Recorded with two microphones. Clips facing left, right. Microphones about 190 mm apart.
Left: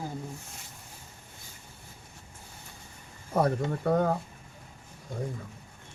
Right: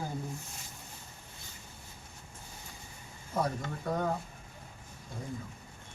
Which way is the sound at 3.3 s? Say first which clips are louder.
Left 7 dB; 65° left (ahead or behind).